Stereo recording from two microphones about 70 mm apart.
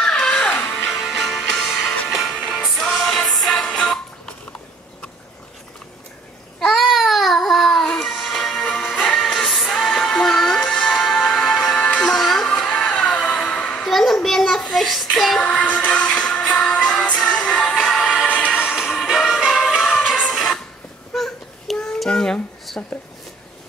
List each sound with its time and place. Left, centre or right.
0.0 s music: centre
0.8 s music: centre
6.6 s music: centre
13.8 s child singing: centre
15.4 s music: centre
18.2 s train: centre
18.5 s music: centre
21.1 s a sound: centre
21.9 s child singing: centre
22.7 s a sound: centre